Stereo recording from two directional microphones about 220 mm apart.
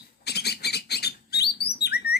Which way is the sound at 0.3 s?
45° left (ahead or behind).